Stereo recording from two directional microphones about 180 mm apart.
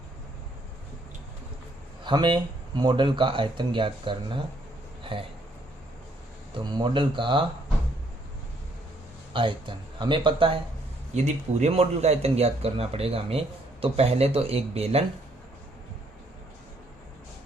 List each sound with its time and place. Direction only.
2.0 s speech: 25° right (ahead or behind)
6.6 s speech: 25° right (ahead or behind)
9.3 s speech: 30° right (ahead or behind)
11.1 s speech: 40° right (ahead or behind)